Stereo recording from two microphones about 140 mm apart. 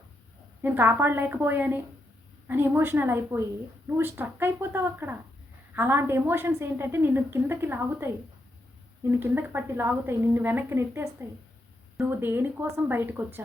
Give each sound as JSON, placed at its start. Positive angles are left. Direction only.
{"t": 0.6, "sound": "a woman's voice", "side_deg": -15}